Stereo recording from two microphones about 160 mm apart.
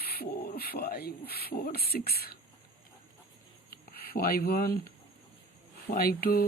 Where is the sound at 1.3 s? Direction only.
70° left (ahead or behind).